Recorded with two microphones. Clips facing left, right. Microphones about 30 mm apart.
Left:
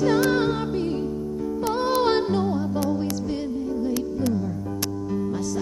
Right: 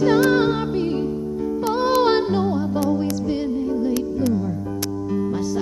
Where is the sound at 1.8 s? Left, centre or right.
Centre.